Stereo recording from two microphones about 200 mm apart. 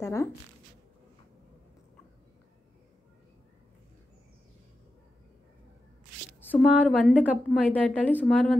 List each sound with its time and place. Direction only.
0.0 s speech: 15° left (ahead or behind)
6.5 s a woman's voice: 5° left (ahead or behind)